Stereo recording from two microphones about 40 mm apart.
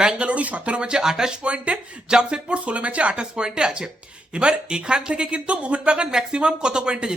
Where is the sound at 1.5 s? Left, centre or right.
Right.